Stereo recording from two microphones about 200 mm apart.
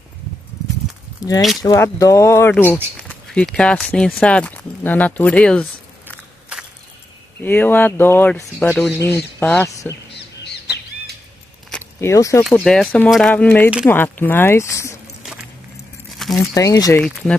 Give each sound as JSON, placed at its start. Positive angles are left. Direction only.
{"t": 1.2, "sound": "speech", "side_deg": 20}
{"t": 7.3, "sound": "speech", "side_deg": 10}
{"t": 11.7, "sound": "a sound", "side_deg": 15}
{"t": 12.4, "sound": "speech", "side_deg": 5}
{"t": 16.3, "sound": "speech", "side_deg": 15}
{"t": 17.0, "sound": "speech", "side_deg": 5}